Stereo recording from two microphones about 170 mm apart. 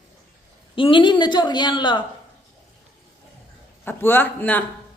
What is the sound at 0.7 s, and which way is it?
A woman's voice, 30° left (ahead or behind).